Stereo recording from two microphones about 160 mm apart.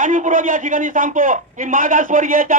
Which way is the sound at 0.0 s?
55° right (ahead or behind).